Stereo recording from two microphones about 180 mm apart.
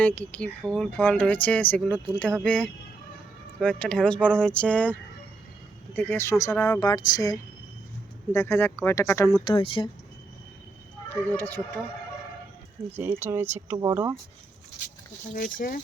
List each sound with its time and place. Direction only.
0.0 s speech: 10° left (ahead or behind)
9.4 s speech: 30° left (ahead or behind)
11.1 s speech: 10° left (ahead or behind)
13.0 s speech: 10° right (ahead or behind)
15.4 s speech: 50° left (ahead or behind)